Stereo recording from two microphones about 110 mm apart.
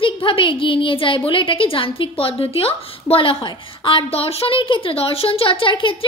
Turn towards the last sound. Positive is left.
turn(degrees=50)  # may be behind; listen again after turning